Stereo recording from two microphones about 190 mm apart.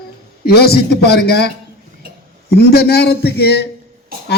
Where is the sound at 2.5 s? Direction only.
55° left (ahead or behind).